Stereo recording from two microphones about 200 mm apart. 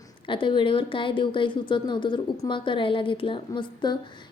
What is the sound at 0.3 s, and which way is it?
A woman's voice, 25° left (ahead or behind).